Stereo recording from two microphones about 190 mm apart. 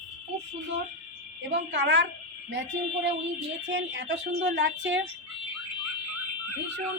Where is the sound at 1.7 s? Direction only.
75° right (ahead or behind).